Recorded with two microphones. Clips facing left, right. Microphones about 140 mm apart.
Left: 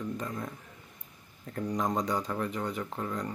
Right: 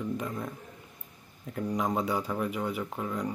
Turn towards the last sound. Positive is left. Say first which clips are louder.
# right 2 dB
turn(degrees=-5)  # may be behind; listen again after turning